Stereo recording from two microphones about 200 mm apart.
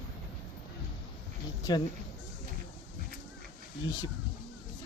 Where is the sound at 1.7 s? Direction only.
20° left (ahead or behind).